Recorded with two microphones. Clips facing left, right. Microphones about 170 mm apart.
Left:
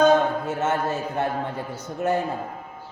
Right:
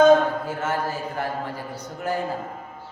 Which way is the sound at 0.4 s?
25° left (ahead or behind).